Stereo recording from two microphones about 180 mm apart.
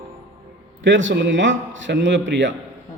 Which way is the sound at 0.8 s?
90° right.